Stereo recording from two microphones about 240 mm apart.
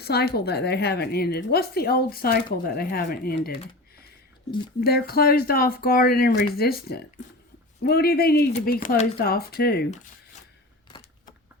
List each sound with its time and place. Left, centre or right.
0.0 s speech: left